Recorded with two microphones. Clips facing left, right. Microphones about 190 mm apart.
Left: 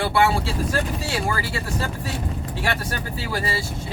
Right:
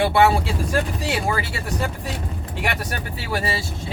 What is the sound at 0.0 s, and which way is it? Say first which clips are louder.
Speech: right 3 dB; 20° right (ahead or behind).